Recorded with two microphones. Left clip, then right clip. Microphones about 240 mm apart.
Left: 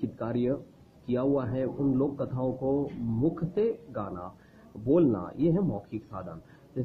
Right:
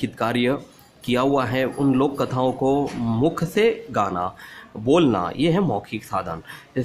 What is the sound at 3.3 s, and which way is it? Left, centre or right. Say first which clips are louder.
Speech: right 9 dB; right.